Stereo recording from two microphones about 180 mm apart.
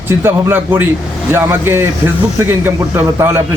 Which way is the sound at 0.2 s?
10° right (ahead or behind).